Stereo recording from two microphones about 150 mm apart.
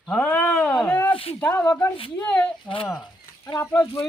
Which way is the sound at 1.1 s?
40° left (ahead or behind).